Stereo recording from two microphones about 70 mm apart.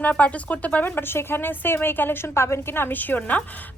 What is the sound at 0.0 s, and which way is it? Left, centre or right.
A woman's voice, left.